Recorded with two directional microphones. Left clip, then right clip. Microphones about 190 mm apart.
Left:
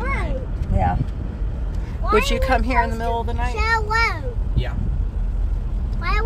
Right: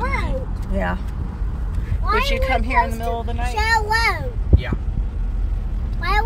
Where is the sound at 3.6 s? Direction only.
60° right (ahead or behind).